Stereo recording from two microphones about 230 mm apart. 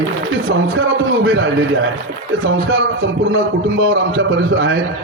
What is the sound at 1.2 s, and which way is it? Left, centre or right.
Speech, right.